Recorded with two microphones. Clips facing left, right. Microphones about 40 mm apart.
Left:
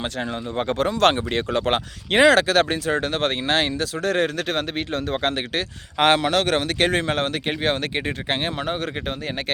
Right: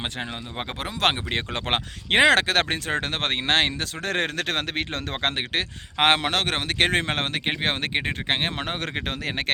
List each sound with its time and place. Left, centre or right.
0.0 s speech: right
1.4 s speech: right